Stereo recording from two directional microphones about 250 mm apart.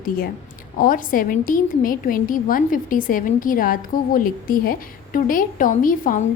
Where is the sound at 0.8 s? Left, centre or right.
Left.